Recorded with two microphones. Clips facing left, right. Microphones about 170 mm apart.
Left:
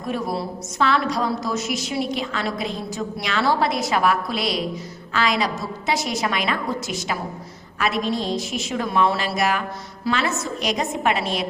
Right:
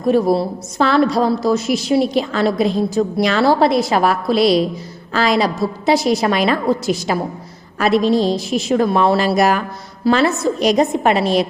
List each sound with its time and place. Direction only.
0.0 s a woman's voice: 35° right (ahead or behind)